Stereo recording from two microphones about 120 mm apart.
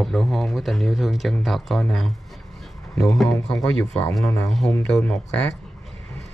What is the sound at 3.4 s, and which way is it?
Speech, 30° left (ahead or behind).